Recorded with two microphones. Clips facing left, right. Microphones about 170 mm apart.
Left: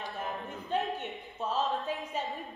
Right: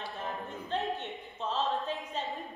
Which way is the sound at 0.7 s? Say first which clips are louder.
Left 2 dB; 10° left (ahead or behind).